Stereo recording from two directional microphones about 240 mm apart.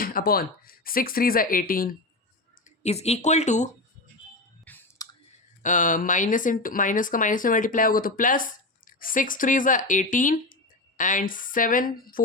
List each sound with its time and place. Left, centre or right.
0.0 s speech: left
2.8 s speech: left
4.6 s chewing: centre
5.6 s speech: left